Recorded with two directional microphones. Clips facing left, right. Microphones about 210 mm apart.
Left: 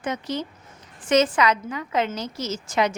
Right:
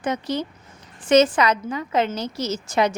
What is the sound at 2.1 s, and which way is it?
Speech, 65° right (ahead or behind).